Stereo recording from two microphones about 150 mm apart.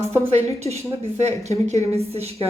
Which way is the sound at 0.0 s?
45° right (ahead or behind).